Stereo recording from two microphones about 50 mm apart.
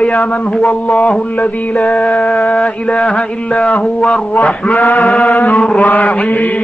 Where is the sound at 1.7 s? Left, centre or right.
Centre.